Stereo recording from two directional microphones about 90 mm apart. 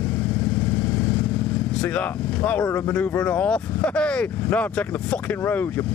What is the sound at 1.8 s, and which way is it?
Speech, 15° left (ahead or behind).